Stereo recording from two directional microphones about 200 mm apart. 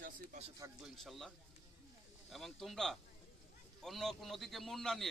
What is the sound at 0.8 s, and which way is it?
A man's voice, centre (ahead or behind).